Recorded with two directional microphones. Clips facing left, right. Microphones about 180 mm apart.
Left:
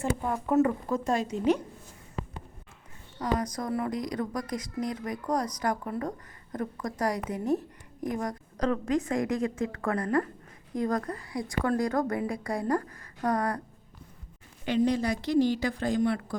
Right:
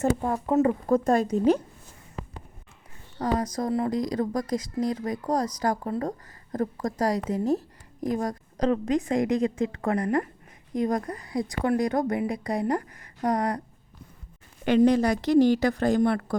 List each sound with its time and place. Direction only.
0.0 s speech: 35° right (ahead or behind)
0.4 s speech: 20° right (ahead or behind)
0.9 s a woman's voice: 50° right (ahead or behind)
3.2 s a woman's voice: 25° right (ahead or behind)
14.6 s speech: 75° right (ahead or behind); by 16.4 s 60° right (ahead or behind)